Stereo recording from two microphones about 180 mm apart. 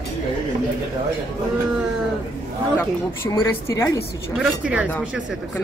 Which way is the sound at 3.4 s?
15° left (ahead or behind).